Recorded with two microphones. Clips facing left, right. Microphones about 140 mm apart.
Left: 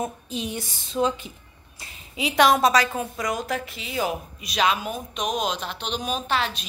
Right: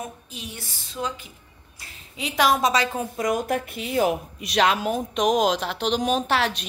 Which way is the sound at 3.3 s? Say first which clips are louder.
Right 7 dB; 55° right (ahead or behind).